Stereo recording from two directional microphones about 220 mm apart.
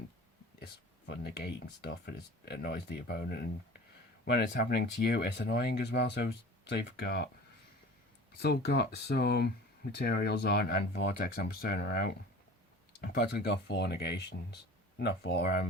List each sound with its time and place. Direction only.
0.6 s speech: 50° left (ahead or behind)
8.4 s speech: 45° left (ahead or behind)